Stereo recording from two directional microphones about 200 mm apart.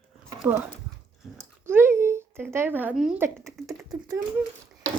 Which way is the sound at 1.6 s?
10° right (ahead or behind).